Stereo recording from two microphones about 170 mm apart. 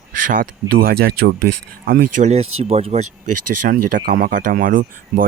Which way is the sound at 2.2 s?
40° right (ahead or behind).